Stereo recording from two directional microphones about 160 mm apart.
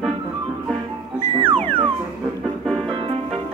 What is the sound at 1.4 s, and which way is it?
Music, 35° right (ahead or behind).